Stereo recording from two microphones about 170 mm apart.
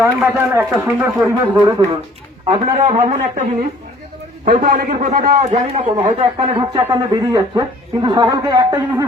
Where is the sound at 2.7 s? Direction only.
45° right (ahead or behind).